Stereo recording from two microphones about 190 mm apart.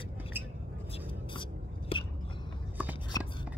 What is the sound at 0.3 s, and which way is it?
Vehicle, 10° right (ahead or behind).